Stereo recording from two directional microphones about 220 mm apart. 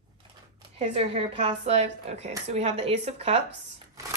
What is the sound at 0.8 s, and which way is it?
A woman's voice, 30° right (ahead or behind).